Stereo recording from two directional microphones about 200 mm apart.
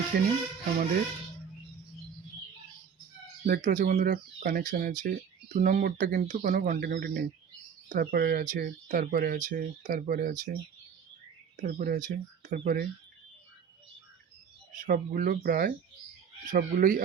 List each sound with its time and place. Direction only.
0.1 s speech: 50° right (ahead or behind)
3.4 s speech: 45° right (ahead or behind)
11.6 s speech: 45° right (ahead or behind)
14.8 s speech: 45° right (ahead or behind)